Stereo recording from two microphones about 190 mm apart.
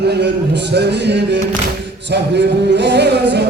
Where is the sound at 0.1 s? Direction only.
60° right (ahead or behind).